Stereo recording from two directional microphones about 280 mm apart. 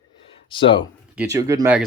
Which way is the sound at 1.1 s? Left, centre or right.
Centre.